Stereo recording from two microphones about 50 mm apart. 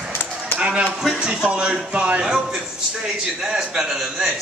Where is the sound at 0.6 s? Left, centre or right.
Centre.